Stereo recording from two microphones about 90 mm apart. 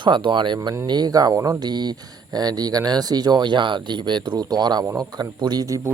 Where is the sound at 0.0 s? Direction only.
60° right (ahead or behind).